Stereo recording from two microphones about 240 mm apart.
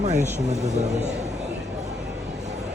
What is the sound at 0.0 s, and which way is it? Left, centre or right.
Speech, right.